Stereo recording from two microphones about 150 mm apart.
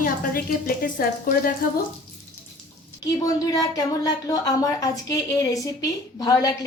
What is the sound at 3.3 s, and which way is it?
A woman's voice, 25° left (ahead or behind).